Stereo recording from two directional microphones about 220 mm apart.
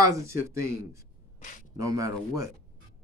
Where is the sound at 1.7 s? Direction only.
15° right (ahead or behind).